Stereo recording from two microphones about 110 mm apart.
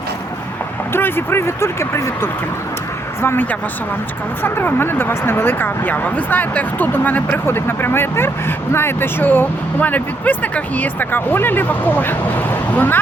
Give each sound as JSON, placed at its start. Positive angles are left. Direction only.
{"t": 0.9, "sound": "speech", "side_deg": 20}